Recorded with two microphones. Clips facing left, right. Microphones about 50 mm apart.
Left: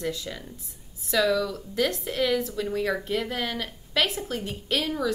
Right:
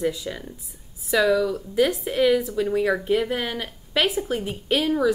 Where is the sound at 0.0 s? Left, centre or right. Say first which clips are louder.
Right 5 dB; centre.